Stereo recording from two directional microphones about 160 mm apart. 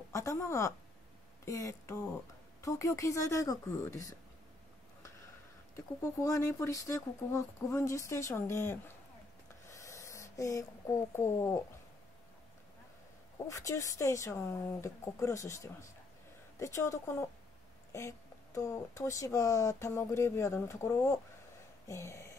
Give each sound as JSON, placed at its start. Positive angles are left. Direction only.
{"t": 0.1, "sound": "a woman's voice", "side_deg": 20}
{"t": 5.8, "sound": "speech", "side_deg": 20}
{"t": 9.7, "sound": "a sound", "side_deg": 20}
{"t": 13.5, "sound": "speech", "side_deg": 20}